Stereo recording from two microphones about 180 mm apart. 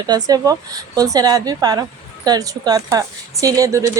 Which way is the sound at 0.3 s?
20° right (ahead or behind).